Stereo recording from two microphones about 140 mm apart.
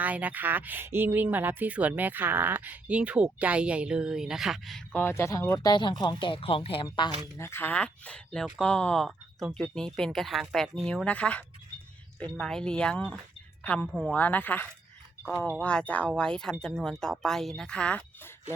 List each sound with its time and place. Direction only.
0.0 s speech: 10° right (ahead or behind)
4.9 s speech: 15° left (ahead or behind)
5.7 s speech: 35° left (ahead or behind)
7.3 s speech: 15° left (ahead or behind)